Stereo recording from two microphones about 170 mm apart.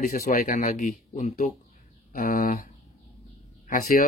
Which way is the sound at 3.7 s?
55° left (ahead or behind).